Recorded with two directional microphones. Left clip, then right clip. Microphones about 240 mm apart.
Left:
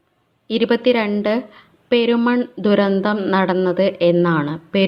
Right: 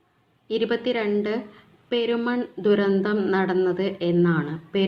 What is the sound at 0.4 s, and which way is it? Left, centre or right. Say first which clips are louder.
A woman's voice: left 7 dB; left.